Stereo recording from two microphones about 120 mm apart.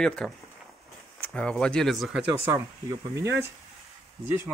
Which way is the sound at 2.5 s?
25° right (ahead or behind).